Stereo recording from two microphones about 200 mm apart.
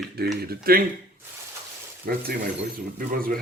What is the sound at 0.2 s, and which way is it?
Speech, 50° right (ahead or behind).